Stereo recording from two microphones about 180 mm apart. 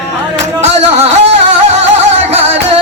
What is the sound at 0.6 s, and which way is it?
Music, 35° right (ahead or behind).